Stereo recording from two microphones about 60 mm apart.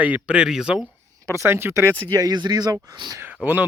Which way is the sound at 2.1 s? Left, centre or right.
Right.